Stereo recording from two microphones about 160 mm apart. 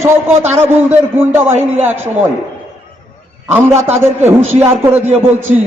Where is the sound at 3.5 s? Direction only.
15° right (ahead or behind).